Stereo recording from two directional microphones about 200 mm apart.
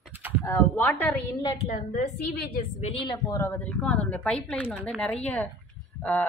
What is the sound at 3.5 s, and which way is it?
A woman's voice, 5° left (ahead or behind).